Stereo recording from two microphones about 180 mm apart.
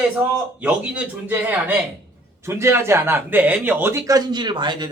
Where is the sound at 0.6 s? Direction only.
5° right (ahead or behind).